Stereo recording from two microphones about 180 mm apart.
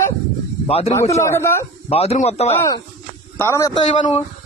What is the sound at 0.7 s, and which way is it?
Speech, 35° left (ahead or behind).